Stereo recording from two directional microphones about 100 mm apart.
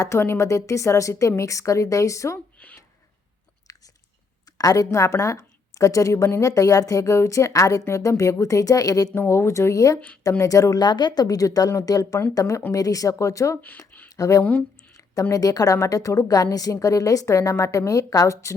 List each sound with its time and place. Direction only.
0.0 s a woman's voice: 25° left (ahead or behind)
2.6 s speech: 15° left (ahead or behind)
3.7 s chewing: 35° left (ahead or behind)
4.4 s a woman's voice: 40° left (ahead or behind)
9.1 s a woman's voice: 25° left (ahead or behind)
13.6 s a sound: 15° left (ahead or behind)
14.2 s a woman's voice: 35° left (ahead or behind)
14.4 s a sound: 15° left (ahead or behind)
15.2 s a woman's voice: 35° left (ahead or behind)